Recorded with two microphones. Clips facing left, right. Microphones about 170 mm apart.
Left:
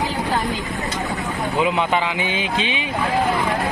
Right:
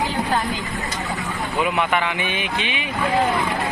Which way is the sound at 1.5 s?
20° left (ahead or behind).